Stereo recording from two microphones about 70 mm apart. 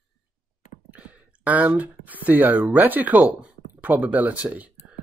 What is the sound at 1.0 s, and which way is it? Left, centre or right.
Speech, right.